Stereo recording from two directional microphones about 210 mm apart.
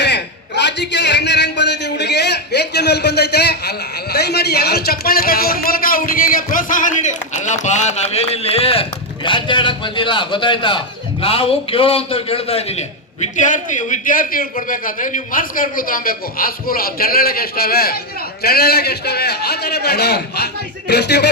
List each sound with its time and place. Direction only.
0.0 s a man's voice: 55° left (ahead or behind)